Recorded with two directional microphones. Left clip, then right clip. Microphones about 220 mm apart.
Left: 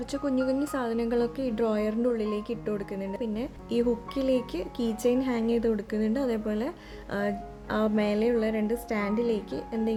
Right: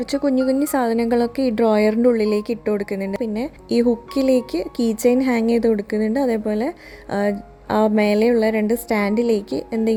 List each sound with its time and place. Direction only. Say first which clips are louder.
0.0 s a woman's voice: right 9 dB; 30° right (ahead or behind)